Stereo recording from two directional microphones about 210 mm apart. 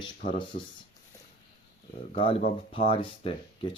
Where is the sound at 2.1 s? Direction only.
25° left (ahead or behind).